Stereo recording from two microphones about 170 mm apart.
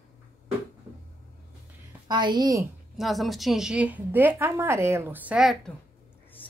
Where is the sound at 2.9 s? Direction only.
Centre (ahead or behind).